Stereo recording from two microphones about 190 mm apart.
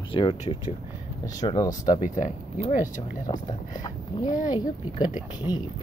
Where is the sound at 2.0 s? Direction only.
40° left (ahead or behind).